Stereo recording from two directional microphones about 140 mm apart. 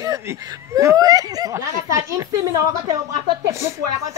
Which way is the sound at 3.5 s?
20° right (ahead or behind).